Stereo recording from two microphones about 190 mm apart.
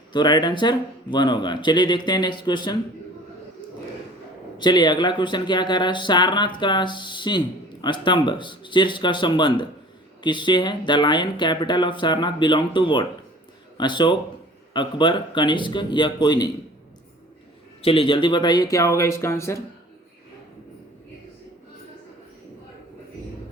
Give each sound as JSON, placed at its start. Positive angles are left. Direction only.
{"t": 0.1, "sound": "speech", "side_deg": 25}
{"t": 4.5, "sound": "speech", "side_deg": 20}
{"t": 17.8, "sound": "speech", "side_deg": 30}